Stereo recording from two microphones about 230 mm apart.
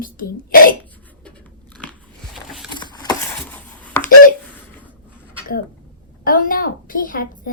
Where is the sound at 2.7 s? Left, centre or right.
Centre.